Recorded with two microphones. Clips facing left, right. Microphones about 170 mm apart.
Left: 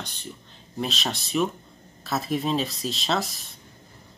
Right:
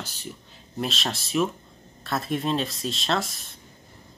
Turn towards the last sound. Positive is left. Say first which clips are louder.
# even
turn(degrees=0)  # may be behind; listen again after turning